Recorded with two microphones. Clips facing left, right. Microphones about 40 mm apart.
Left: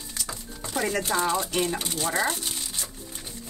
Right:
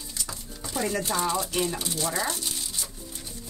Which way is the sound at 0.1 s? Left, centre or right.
Left.